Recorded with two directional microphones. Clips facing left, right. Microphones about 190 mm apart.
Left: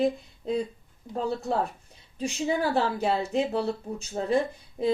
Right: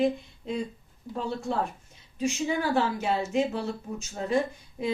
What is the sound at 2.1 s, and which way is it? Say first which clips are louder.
A woman's voice: even; 35° left (ahead or behind).